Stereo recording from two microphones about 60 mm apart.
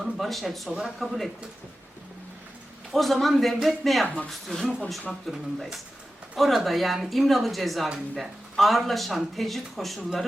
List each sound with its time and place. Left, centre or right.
0.0 s speech: centre
2.9 s speech: centre
4.0 s speech: left
4.3 s speech: centre